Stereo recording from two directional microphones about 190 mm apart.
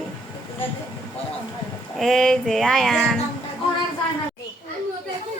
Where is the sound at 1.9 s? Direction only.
Centre (ahead or behind).